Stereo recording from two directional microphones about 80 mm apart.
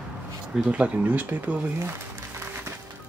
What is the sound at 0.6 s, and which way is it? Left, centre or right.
Speech, centre.